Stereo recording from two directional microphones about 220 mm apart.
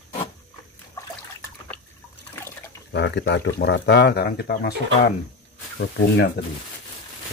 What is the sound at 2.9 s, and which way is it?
Speech, 50° left (ahead or behind).